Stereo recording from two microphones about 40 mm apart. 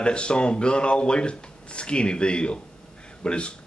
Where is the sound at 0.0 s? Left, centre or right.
Left.